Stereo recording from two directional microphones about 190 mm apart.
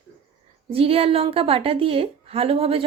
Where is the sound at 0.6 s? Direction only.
30° right (ahead or behind).